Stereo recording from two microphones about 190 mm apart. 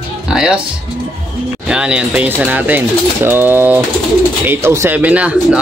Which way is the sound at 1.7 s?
5° right (ahead or behind).